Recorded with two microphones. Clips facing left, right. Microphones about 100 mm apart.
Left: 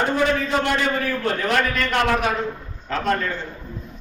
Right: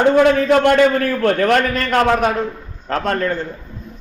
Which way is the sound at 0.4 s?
65° right (ahead or behind).